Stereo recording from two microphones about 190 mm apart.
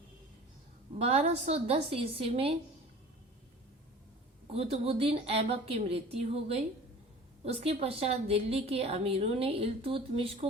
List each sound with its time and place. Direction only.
0.9 s a woman's voice: 35° right (ahead or behind)
4.4 s a woman's voice: 30° right (ahead or behind)